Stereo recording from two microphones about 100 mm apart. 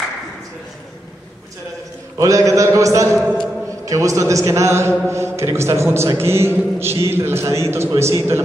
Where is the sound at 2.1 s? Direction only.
35° right (ahead or behind).